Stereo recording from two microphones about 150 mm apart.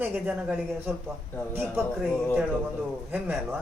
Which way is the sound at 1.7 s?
Centre (ahead or behind).